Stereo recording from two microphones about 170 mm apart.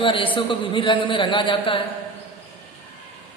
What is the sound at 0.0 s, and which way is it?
Speech, 30° left (ahead or behind).